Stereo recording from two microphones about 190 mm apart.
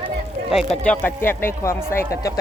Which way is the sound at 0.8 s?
10° left (ahead or behind).